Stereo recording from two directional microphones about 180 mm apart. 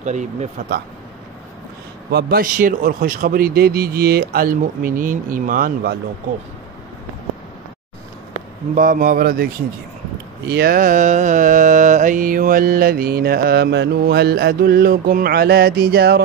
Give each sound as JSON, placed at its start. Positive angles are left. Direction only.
{"t": 0.0, "sound": "speech", "side_deg": -40}
{"t": 2.0, "sound": "mantra", "side_deg": -65}
{"t": 8.7, "sound": "speech", "side_deg": -50}
{"t": 10.5, "sound": "mantra", "side_deg": -55}